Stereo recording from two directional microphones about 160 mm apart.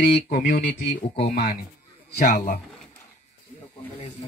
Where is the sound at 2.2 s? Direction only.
55° left (ahead or behind).